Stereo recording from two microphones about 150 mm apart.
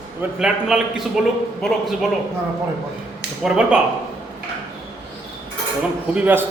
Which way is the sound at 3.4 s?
5° right (ahead or behind).